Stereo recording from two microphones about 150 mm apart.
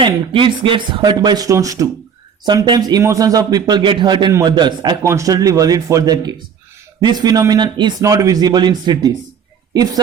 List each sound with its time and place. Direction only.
0.0 s speech: 35° right (ahead or behind)